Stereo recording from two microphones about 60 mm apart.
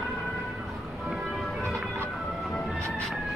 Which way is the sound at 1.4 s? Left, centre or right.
Centre.